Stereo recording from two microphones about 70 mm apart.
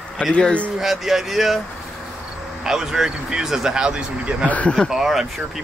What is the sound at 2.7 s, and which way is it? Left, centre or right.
Speech, centre.